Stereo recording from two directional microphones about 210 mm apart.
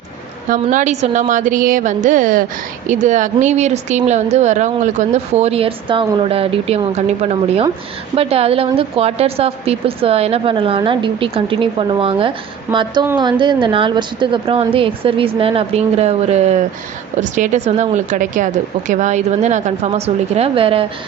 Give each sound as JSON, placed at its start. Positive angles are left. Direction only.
{"t": 0.5, "sound": "a woman's voice", "side_deg": -35}